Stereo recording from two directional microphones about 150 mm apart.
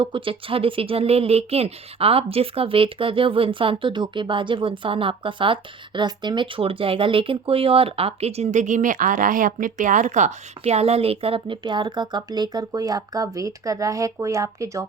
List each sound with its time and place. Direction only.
0.0 s speech: 35° right (ahead or behind)